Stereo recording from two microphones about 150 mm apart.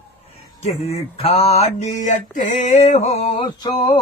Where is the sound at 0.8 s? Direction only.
45° left (ahead or behind).